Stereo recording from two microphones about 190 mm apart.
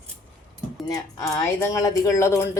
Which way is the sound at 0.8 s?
20° left (ahead or behind).